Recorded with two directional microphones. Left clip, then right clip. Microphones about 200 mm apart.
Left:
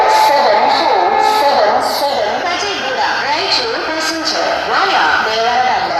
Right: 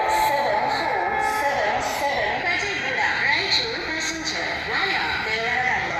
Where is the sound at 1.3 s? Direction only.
45° left (ahead or behind).